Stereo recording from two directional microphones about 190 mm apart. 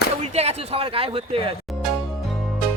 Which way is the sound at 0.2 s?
35° right (ahead or behind).